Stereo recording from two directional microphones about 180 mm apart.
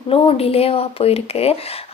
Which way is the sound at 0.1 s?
30° left (ahead or behind).